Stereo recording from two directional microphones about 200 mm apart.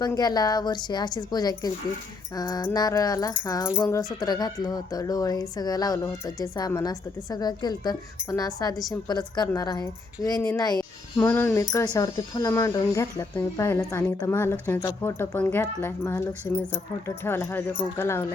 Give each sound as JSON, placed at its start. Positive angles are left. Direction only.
{"t": 0.0, "sound": "speech", "side_deg": 20}